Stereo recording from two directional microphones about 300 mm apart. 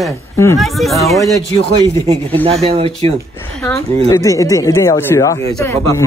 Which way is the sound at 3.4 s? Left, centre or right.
Centre.